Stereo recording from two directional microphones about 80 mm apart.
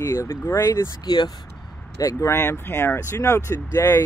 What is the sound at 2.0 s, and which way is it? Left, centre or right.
Speech, left.